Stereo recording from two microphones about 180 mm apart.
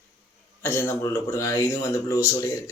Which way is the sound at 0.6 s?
15° left (ahead or behind).